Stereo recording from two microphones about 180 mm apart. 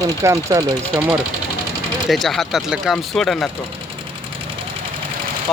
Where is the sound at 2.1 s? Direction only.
Centre (ahead or behind).